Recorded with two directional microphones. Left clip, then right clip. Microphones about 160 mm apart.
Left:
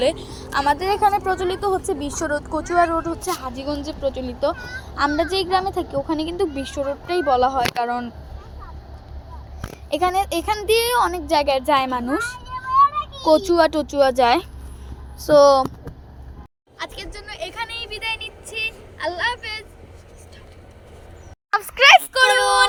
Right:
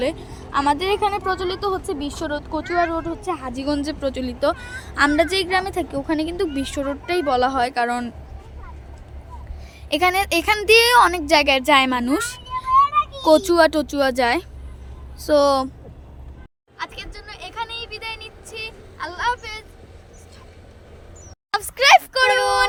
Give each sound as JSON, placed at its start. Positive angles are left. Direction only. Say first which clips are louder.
{"t": 0.0, "sound": "a woman's voice", "louder": "left 4 dB", "side_deg": -50}
{"t": 1.2, "sound": "speech", "louder": "left 1 dB", "side_deg": -20}
{"t": 3.4, "sound": "speech", "louder": "right 3 dB", "side_deg": -35}
{"t": 4.8, "sound": "a woman's voice", "louder": "right 3 dB", "side_deg": -50}
{"t": 9.9, "sound": "a woman's voice", "louder": "right 2 dB", "side_deg": -50}
{"t": 12.7, "sound": "a sound", "louder": "even", "side_deg": -20}
{"t": 13.2, "sound": "speech", "louder": "even", "side_deg": -40}
{"t": 16.7, "sound": "vehicle", "louder": "even", "side_deg": -10}
{"t": 21.5, "sound": "a sound", "louder": "left 2 dB", "side_deg": -5}